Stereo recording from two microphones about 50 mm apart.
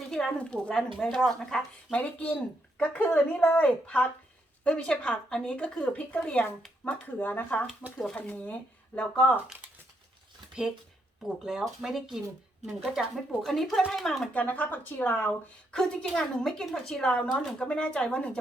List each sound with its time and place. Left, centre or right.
0.0 s a sound: centre
0.3 s a woman's voice: left
0.7 s a woman's voice: centre
1.9 s a woman's voice: left
6.8 s speech: left
7.9 s a woman's voice: centre
11.8 s speech: centre
14.3 s speech: left
15.7 s a woman's voice: centre